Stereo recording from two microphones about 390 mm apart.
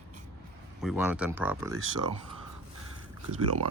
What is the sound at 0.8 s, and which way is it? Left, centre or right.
Speech, centre.